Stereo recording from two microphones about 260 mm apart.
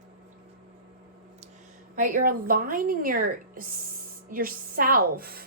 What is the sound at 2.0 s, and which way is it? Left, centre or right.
A woman's voice, right.